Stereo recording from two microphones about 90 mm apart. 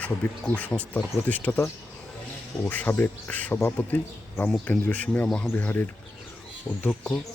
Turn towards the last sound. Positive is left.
turn(degrees=15)  # may be behind; listen again after turning